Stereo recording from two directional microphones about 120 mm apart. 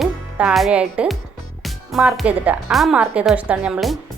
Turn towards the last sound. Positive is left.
turn(degrees=-5)  # may be behind; listen again after turning